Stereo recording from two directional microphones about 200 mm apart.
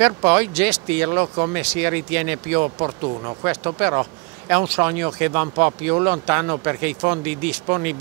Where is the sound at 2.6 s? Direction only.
20° right (ahead or behind).